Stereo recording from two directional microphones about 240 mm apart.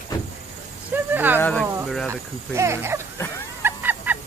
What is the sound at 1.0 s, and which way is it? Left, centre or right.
Speech, centre.